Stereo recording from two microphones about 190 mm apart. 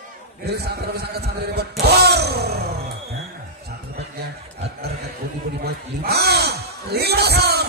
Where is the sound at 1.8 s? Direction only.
55° right (ahead or behind).